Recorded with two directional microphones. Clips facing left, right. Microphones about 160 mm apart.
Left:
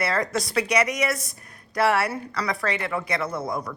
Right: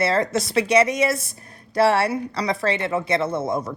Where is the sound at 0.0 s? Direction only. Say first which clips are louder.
Right 4 dB; 25° right (ahead or behind).